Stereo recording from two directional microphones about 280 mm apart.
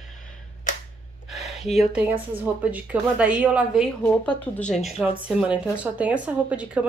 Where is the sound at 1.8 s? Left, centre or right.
Centre.